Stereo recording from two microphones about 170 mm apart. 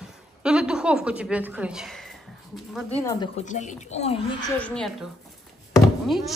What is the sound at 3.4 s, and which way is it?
Speech, 45° left (ahead or behind).